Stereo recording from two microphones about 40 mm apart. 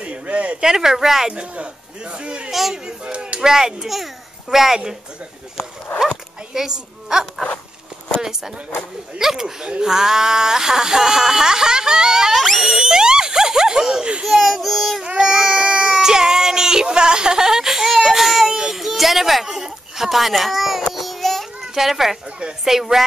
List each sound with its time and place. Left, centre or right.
0.0 s a sound: right
0.6 s speech: centre
1.3 s a man's voice: right
3.3 s speech: centre
6.5 s speech: centre
12.4 s screaming: centre
12.6 s a sound: centre
14.2 s speech: centre
15.1 s a child's voice: centre
20.9 s child singing: centre
21.7 s speech: centre